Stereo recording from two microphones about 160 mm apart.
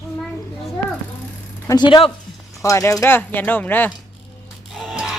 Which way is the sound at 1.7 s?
30° left (ahead or behind).